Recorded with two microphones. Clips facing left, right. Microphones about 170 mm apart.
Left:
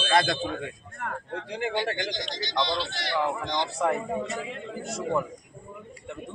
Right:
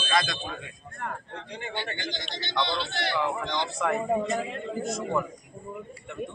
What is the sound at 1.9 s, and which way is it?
Speech, 90° left.